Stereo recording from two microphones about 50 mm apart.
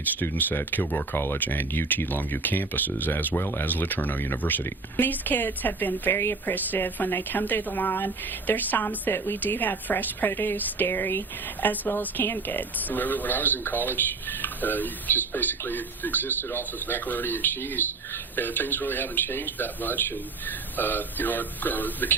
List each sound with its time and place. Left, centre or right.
0.2 s speech: left